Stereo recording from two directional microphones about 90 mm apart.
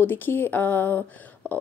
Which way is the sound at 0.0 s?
20° left (ahead or behind).